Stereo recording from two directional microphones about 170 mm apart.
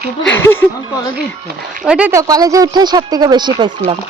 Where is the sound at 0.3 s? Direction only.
10° left (ahead or behind).